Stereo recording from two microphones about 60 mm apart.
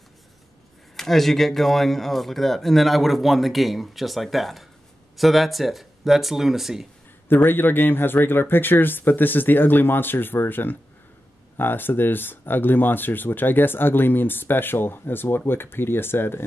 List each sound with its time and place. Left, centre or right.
0.9 s speech: centre
7.2 s speech: left